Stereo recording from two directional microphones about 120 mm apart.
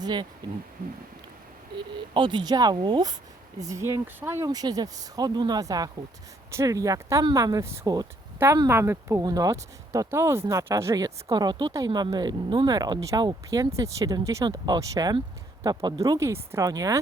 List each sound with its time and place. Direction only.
0.0 s speech: 35° right (ahead or behind)
2.1 s speech: 40° right (ahead or behind); by 4.4 s 20° right (ahead or behind)
4.4 s speech: 30° right (ahead or behind)